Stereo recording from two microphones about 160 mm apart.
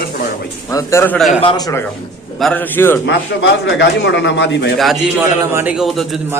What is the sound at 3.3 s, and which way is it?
Speech, 90° left.